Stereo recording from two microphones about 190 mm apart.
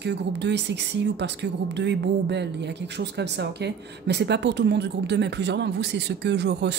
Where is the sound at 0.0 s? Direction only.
65° right (ahead or behind).